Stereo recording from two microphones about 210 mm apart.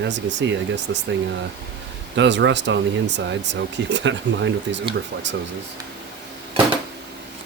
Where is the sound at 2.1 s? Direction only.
60° right (ahead or behind).